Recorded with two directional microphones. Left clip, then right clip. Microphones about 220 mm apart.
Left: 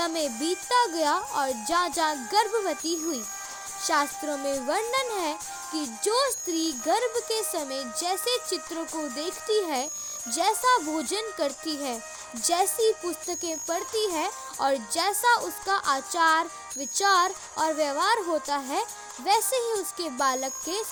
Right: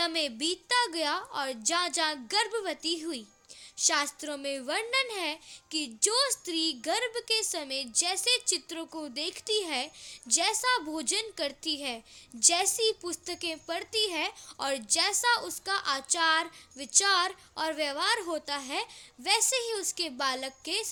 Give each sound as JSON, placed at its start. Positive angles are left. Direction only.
{"t": 0.0, "sound": "a child's voice", "side_deg": 20}